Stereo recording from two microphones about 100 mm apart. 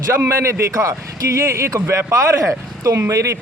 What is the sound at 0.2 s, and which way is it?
A man's voice, 30° right (ahead or behind).